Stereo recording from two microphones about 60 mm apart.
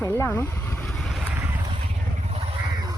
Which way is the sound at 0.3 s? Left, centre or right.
Left.